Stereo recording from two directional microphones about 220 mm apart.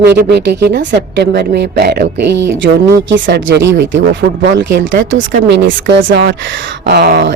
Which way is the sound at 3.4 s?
55° right (ahead or behind).